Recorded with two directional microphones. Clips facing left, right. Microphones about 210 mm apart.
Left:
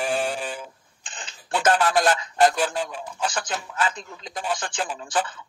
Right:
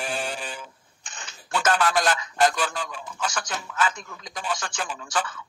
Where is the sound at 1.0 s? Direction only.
30° left (ahead or behind).